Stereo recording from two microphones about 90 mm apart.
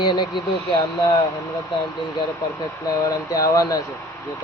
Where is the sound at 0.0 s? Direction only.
60° left (ahead or behind).